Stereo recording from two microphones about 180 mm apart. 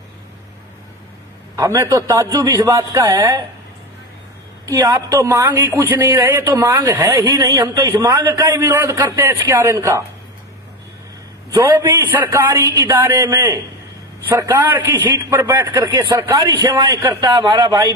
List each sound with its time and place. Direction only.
1.5 s speech: 15° right (ahead or behind)
4.6 s speech: 15° right (ahead or behind)
11.5 s a man's voice: 15° right (ahead or behind)